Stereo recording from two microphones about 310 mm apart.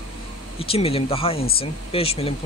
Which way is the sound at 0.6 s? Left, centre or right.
Centre.